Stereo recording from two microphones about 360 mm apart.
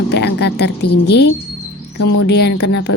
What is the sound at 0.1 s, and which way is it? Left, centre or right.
A woman's voice, left.